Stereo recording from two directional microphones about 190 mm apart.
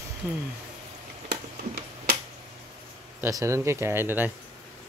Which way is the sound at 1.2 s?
60° right (ahead or behind).